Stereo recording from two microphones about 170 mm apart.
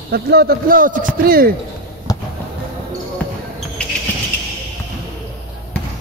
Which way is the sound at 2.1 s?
20° left (ahead or behind).